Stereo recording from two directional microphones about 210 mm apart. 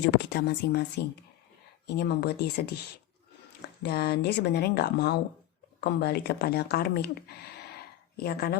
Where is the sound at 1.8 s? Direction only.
50° left (ahead or behind).